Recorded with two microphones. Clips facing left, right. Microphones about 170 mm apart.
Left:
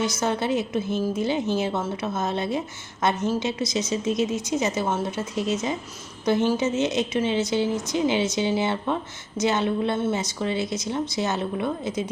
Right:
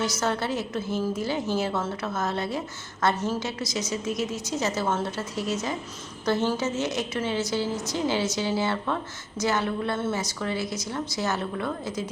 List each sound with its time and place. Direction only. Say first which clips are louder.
0.0 s a woman's voice: left 2 dB; 20° left (ahead or behind)